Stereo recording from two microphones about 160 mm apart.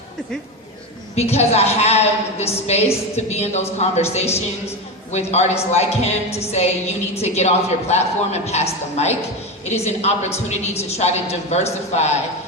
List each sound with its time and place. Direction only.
1.1 s a woman's voice: 40° left (ahead or behind)